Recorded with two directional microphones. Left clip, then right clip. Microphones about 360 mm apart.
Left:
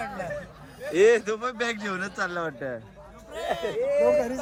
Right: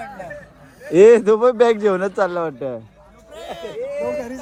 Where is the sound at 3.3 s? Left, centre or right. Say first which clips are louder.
Left 2 dB; centre.